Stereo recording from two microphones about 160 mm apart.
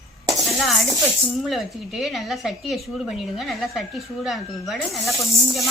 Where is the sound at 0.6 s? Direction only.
Centre (ahead or behind).